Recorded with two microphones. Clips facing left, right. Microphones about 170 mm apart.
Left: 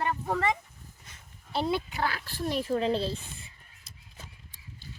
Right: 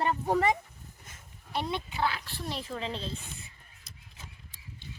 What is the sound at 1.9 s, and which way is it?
Speech, 40° left (ahead or behind).